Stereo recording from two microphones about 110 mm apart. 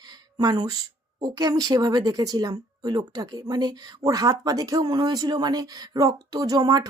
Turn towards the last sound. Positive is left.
turn(degrees=-35)  # may be behind; listen again after turning